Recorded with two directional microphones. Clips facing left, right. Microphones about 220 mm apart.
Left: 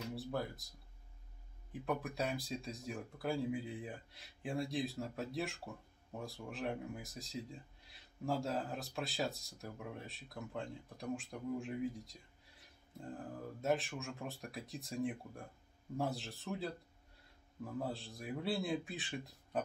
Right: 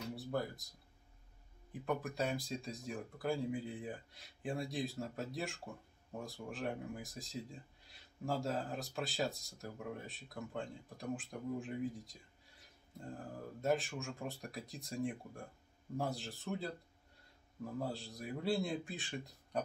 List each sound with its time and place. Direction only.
0.1 s music: centre (ahead or behind)
1.7 s speech: centre (ahead or behind)
13.6 s speech: centre (ahead or behind)
17.7 s speech: centre (ahead or behind)